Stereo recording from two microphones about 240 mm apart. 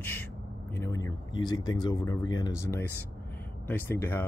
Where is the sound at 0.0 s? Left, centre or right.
Centre.